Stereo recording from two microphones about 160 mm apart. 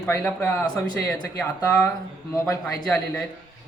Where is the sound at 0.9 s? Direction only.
25° left (ahead or behind).